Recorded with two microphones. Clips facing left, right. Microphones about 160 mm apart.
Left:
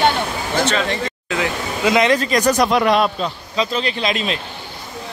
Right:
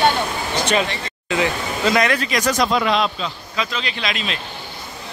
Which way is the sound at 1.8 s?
20° left (ahead or behind).